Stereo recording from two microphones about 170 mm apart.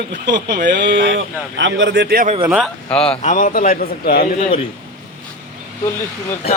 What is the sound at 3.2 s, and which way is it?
A man's voice, 50° left (ahead or behind).